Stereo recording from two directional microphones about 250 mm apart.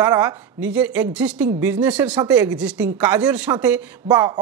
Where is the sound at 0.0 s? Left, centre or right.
Centre.